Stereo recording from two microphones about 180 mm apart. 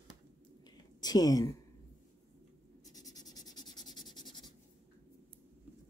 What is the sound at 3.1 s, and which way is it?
Writing, 20° left (ahead or behind).